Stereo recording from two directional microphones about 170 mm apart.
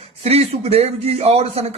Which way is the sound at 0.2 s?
35° right (ahead or behind).